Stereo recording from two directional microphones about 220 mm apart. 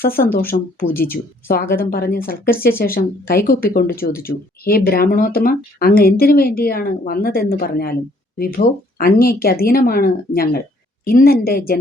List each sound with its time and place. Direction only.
0.0 s speech: 40° left (ahead or behind)